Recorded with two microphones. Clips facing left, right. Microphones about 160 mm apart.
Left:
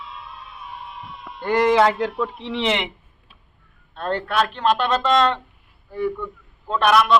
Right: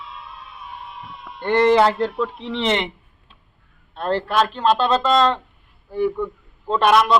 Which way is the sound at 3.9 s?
30° right (ahead or behind).